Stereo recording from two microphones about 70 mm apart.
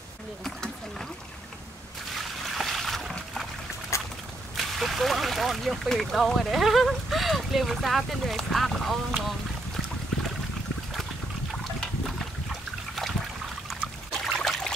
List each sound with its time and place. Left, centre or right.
0.4 s speech: centre
2.5 s boat: centre
3.9 s a sound: left
4.6 s speech: centre
13.7 s trickle: centre